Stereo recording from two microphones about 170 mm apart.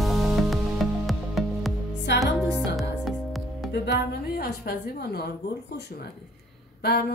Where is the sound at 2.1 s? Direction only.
90° left.